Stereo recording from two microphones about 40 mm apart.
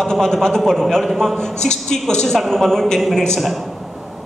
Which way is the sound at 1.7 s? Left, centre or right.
Centre.